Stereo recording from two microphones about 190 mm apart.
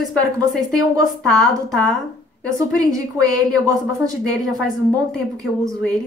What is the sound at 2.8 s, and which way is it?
Speech, 20° right (ahead or behind).